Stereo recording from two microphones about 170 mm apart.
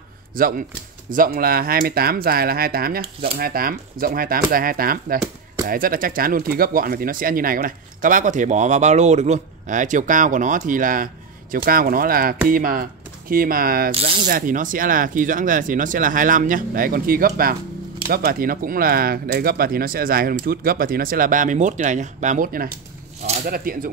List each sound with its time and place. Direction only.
0.3 s speech: 55° right (ahead or behind)